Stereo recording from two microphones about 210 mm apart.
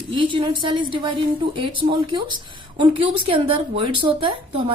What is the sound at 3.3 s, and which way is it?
Speech, 25° right (ahead or behind).